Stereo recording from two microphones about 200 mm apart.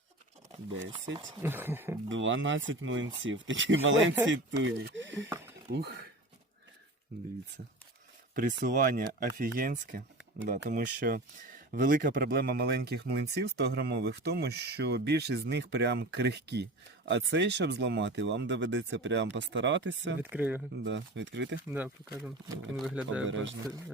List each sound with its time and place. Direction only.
0.7 s speech: 65° right (ahead or behind)
1.4 s speech: 10° right (ahead or behind)
2.0 s speech: 70° right (ahead or behind); by 6.1 s 55° right (ahead or behind)
8.4 s speech: 45° right (ahead or behind); by 20.1 s 65° right (ahead or behind)
20.3 s speech: 10° right (ahead or behind)
20.8 s speech: 65° right (ahead or behind)
21.7 s speech: 5° right (ahead or behind)